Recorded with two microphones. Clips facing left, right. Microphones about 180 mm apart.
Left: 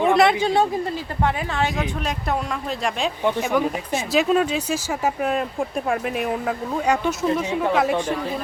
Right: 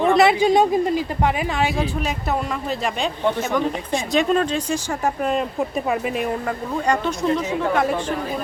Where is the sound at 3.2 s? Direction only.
10° left (ahead or behind).